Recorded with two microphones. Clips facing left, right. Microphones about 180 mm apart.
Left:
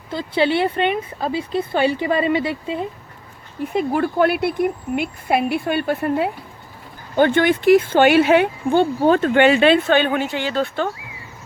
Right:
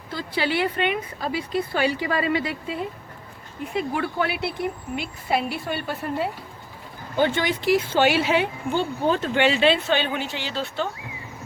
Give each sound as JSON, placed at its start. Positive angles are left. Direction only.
{"t": 0.1, "sound": "speech", "side_deg": 25}
{"t": 3.7, "sound": "a woman's voice", "side_deg": 50}